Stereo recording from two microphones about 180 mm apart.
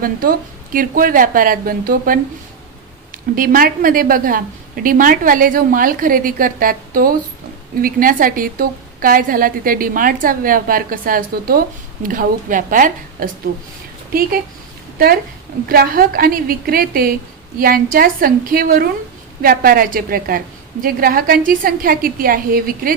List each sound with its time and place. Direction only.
0.0 s a woman's voice: 50° right (ahead or behind)
3.3 s a woman's voice: 50° right (ahead or behind)
14.9 s a woman's voice: 55° right (ahead or behind)